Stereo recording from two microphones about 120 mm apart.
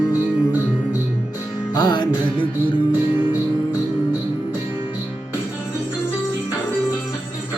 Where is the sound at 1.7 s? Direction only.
35° left (ahead or behind).